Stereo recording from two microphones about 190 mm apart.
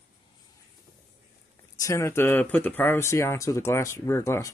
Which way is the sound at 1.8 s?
15° left (ahead or behind).